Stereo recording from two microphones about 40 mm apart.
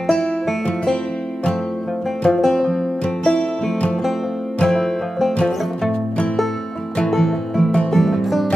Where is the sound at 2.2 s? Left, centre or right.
Centre.